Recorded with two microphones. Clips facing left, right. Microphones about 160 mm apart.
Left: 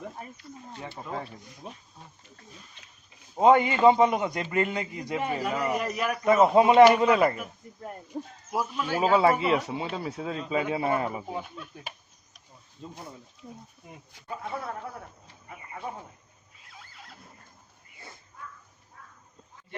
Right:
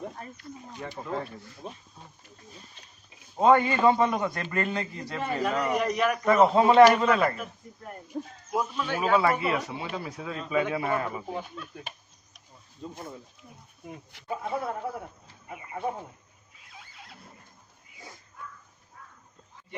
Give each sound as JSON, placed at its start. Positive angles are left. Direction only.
{"t": 1.0, "sound": "a man's voice", "side_deg": 15}
{"t": 3.4, "sound": "a man's voice", "side_deg": 20}
{"t": 8.5, "sound": "a man's voice", "side_deg": 5}
{"t": 9.0, "sound": "speech", "side_deg": 25}
{"t": 14.3, "sound": "speech", "side_deg": -15}
{"t": 17.9, "sound": "a sound", "side_deg": -10}